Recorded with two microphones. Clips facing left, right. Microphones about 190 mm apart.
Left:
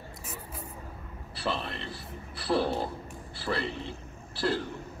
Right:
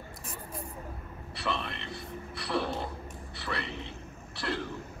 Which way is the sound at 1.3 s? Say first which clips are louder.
Left 2 dB; 30° left (ahead or behind).